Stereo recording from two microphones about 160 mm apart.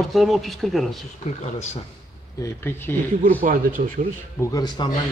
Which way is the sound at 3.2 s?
60° right (ahead or behind).